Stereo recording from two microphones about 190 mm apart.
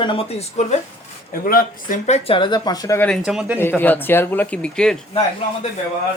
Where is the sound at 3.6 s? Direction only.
10° left (ahead or behind).